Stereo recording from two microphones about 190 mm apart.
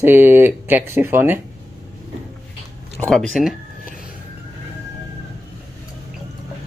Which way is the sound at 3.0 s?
5° left (ahead or behind).